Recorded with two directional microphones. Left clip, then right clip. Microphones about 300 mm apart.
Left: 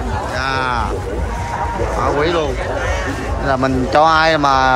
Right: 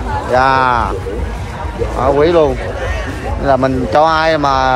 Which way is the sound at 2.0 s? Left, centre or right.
Centre.